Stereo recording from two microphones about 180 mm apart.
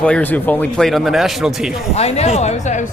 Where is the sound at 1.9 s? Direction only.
35° left (ahead or behind).